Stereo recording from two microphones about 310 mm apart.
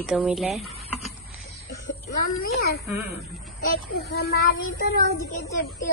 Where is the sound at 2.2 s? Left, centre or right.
Left.